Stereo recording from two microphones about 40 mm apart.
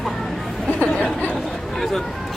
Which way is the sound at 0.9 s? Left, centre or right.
Centre.